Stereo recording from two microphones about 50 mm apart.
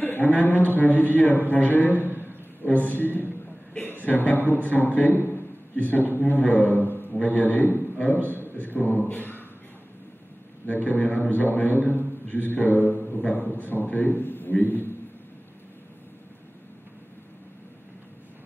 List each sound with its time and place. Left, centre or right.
0.0 s a man's voice: left
2.0 s a sound: right
2.2 s a man's voice: left
10.7 s a man's voice: left
11.9 s a sound: left
13.2 s a man's voice: left